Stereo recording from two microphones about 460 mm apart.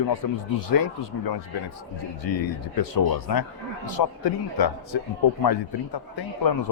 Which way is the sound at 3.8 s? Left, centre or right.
Left.